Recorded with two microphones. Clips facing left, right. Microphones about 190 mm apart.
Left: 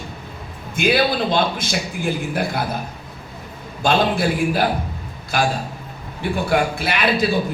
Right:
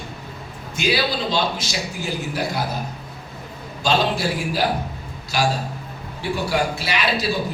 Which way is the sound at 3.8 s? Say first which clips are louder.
Left 3 dB; 55° left (ahead or behind).